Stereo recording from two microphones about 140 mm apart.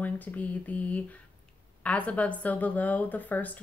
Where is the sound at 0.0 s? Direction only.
10° left (ahead or behind).